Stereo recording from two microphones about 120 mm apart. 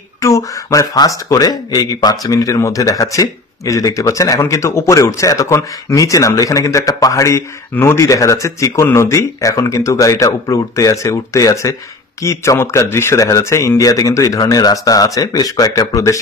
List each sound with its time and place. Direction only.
0.2 s speech: 25° left (ahead or behind)